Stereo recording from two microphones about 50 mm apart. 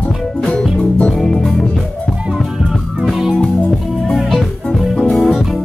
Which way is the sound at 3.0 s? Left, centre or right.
Centre.